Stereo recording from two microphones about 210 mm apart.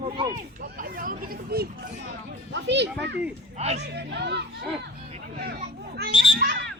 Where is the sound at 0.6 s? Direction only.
45° right (ahead or behind).